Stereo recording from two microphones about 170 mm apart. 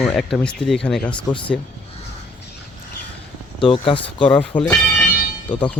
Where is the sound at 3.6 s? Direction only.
30° left (ahead or behind).